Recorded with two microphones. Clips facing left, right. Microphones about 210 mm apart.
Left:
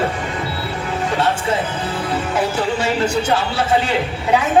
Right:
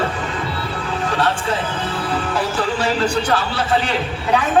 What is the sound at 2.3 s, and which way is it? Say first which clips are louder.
Speech: left 3 dB; 25° left (ahead or behind).